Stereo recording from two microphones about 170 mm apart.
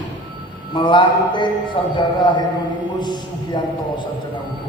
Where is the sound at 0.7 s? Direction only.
30° left (ahead or behind).